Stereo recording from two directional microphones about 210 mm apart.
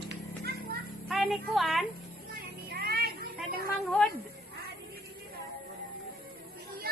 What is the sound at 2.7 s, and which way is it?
Children playing, 45° right (ahead or behind).